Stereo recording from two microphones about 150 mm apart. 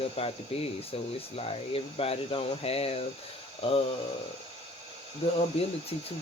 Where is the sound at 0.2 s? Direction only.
40° left (ahead or behind).